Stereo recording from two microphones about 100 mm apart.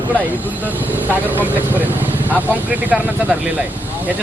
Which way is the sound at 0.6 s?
20° right (ahead or behind).